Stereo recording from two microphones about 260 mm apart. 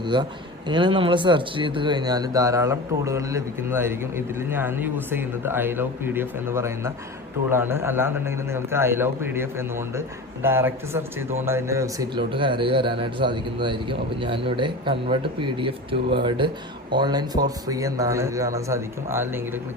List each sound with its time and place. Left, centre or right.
0.0 s a man's voice: centre